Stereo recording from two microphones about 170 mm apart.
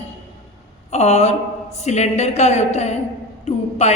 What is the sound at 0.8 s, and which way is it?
A woman's voice, 40° left (ahead or behind).